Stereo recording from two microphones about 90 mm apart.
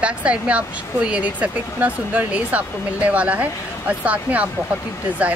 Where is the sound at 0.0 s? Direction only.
15° right (ahead or behind).